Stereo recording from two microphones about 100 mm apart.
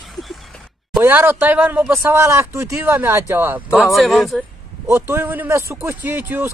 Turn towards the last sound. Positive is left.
turn(degrees=-20)  # may be behind; listen again after turning